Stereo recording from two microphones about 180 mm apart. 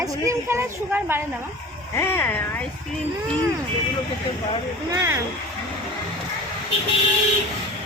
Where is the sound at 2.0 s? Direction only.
10° left (ahead or behind).